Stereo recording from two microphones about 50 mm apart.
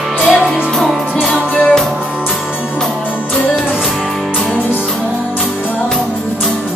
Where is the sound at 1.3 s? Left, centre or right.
Left.